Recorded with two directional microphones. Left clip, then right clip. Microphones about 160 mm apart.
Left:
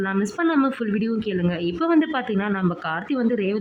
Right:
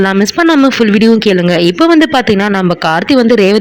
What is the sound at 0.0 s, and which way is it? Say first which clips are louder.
Speech: right 14 dB; 40° right (ahead or behind).